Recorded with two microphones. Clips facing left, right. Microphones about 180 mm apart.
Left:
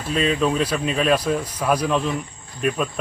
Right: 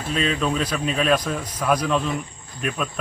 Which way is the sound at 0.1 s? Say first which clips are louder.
Left 3 dB; 5° left (ahead or behind).